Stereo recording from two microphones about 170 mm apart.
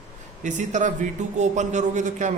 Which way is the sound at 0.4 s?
50° right (ahead or behind).